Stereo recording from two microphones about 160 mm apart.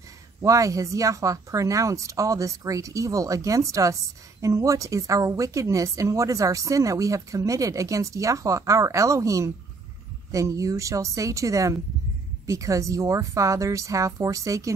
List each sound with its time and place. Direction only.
0.4 s speech: 20° right (ahead or behind)